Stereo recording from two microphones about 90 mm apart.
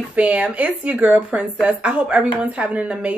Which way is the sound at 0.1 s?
15° right (ahead or behind).